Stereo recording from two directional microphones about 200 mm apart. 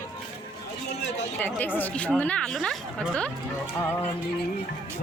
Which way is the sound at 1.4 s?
10° left (ahead or behind).